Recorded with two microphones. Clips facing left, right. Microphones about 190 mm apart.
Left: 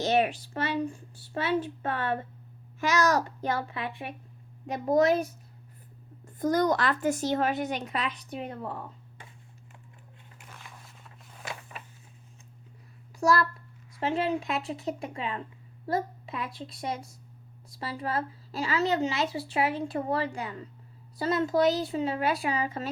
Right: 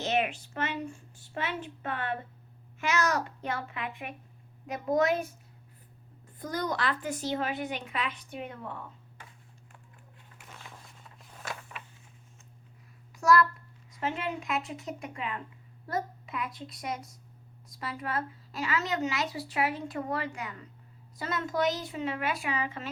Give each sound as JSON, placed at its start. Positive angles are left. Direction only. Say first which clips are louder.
{"t": 0.0, "sound": "a woman's voice", "louder": "left 4 dB", "side_deg": 35}
{"t": 6.4, "sound": "speech", "louder": "left 7 dB", "side_deg": 45}
{"t": 13.1, "sound": "a child's voice", "louder": "right 1 dB", "side_deg": 30}